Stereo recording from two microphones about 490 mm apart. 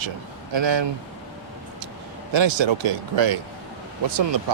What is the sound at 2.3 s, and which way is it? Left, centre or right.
Speech, right.